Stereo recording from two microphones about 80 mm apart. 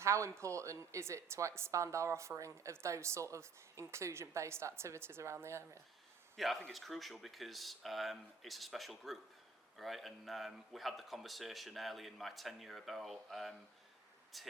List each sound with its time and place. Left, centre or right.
0.0 s a woman's voice: right
6.3 s speech: centre